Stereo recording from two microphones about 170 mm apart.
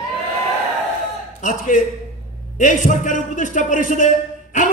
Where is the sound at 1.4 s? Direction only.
50° left (ahead or behind).